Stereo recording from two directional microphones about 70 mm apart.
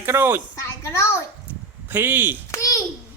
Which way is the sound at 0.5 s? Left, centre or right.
Left.